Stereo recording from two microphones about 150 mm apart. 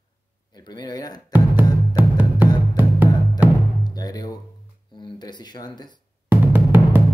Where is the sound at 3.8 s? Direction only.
25° left (ahead or behind).